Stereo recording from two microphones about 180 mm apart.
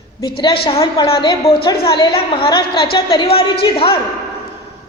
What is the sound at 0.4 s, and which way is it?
Speech, 30° left (ahead or behind).